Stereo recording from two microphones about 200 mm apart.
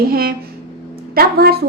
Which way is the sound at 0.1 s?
50° right (ahead or behind).